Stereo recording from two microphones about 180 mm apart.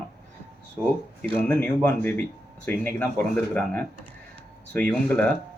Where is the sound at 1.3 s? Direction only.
10° left (ahead or behind).